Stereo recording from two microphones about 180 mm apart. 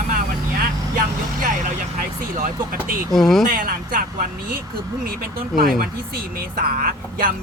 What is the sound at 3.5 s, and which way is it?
Speech, 50° right (ahead or behind).